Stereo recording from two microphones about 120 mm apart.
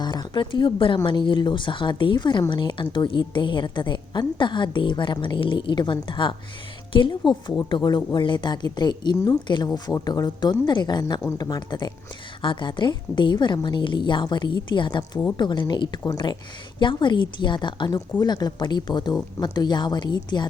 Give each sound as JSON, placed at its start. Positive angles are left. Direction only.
{"t": 0.0, "sound": "a woman's voice", "side_deg": 35}